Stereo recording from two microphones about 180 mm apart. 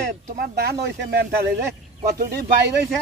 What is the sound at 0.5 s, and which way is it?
Speech, 65° right (ahead or behind).